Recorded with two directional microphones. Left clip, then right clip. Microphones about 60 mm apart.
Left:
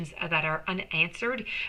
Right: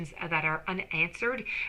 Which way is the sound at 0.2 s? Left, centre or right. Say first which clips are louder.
Left 2 dB; right.